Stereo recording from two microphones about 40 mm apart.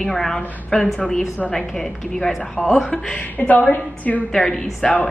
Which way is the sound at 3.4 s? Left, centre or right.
Left.